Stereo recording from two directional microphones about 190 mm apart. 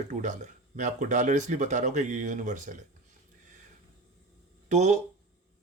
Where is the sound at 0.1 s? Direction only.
40° right (ahead or behind).